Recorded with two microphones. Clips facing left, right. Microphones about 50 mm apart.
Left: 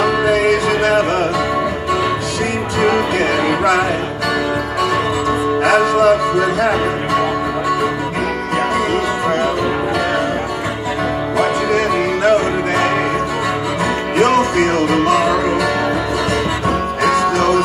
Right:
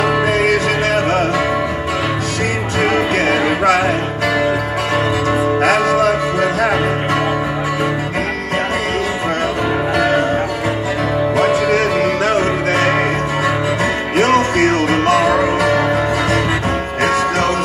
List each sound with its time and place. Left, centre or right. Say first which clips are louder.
0.2 s music: left 1 dB; right
5.6 s music: left 2 dB; right
11.3 s music: right 1 dB; right
14.1 s music: even; right
17.0 s music: left 1 dB; right